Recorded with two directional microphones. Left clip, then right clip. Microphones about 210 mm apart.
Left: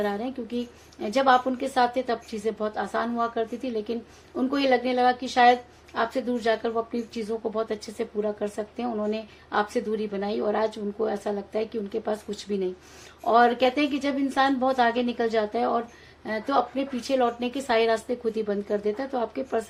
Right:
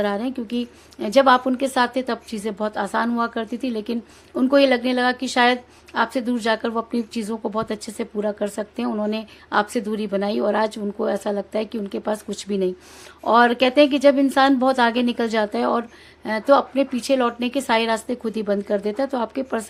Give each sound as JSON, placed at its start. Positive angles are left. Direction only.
{"t": 0.0, "sound": "a woman's voice", "side_deg": -40}